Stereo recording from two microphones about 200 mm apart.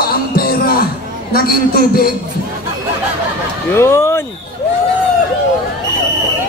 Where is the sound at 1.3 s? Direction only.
50° left (ahead or behind).